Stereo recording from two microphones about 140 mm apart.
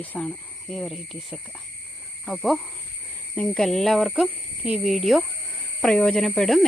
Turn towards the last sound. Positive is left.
turn(degrees=0)  # may be behind; listen again after turning